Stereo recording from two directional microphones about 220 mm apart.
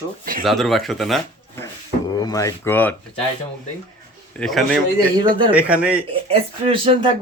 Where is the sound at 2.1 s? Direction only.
20° left (ahead or behind).